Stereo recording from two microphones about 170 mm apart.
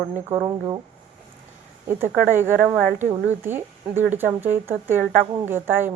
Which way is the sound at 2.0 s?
15° right (ahead or behind).